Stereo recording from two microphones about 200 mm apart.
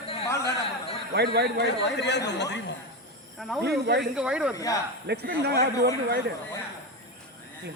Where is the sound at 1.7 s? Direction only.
60° left (ahead or behind).